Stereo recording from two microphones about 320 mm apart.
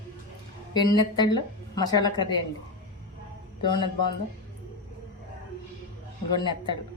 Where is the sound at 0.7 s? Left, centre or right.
Centre.